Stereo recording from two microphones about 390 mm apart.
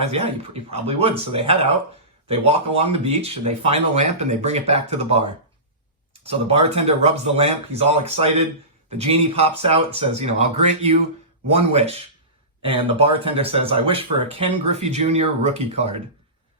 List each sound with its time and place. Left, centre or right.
0.0 s speech: centre
11.4 s speech: centre